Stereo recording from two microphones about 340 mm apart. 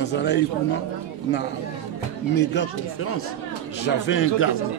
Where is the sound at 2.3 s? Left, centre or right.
Left.